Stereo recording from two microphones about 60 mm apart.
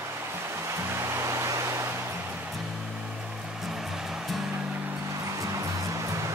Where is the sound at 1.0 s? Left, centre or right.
Right.